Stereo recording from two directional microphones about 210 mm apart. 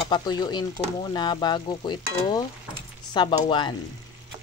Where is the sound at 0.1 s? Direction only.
20° left (ahead or behind).